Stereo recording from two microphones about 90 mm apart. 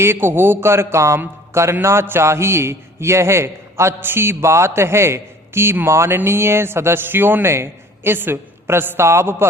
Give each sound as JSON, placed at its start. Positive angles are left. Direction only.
{"t": 0.0, "sound": "a man's voice", "side_deg": -25}